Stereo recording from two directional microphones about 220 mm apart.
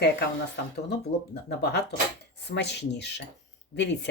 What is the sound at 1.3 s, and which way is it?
Speech, 50° left (ahead or behind).